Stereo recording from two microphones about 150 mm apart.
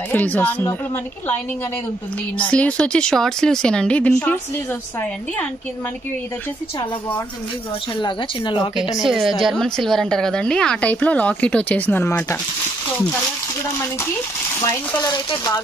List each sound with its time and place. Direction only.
0.1 s a woman's voice: 10° left (ahead or behind)
2.3 s a woman's voice: 10° left (ahead or behind)
9.0 s a woman's voice: centre (ahead or behind); by 12.4 s 15° left (ahead or behind)
15.3 s speech: 25° left (ahead or behind)